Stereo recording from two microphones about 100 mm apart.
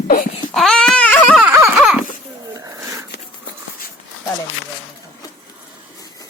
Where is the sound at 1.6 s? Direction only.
5° right (ahead or behind).